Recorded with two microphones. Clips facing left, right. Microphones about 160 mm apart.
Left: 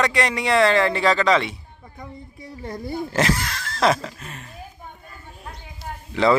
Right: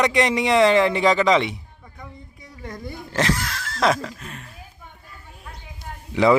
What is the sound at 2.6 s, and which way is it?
Speech, 30° left (ahead or behind).